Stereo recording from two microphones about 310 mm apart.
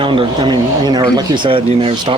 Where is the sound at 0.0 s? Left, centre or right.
Centre.